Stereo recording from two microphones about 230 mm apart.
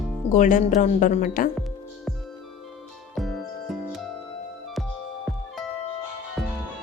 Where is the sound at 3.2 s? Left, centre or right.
Centre.